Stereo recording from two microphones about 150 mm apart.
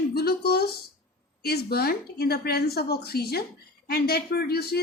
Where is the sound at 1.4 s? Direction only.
90° left.